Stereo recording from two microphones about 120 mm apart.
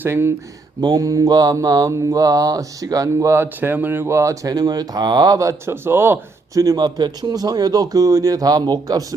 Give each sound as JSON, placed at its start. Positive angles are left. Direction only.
{"t": 0.0, "sound": "speech", "side_deg": -20}
{"t": 0.8, "sound": "mantra", "side_deg": -35}